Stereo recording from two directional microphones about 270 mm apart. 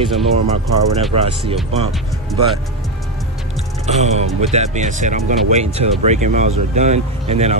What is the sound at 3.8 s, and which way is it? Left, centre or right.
Speech, right.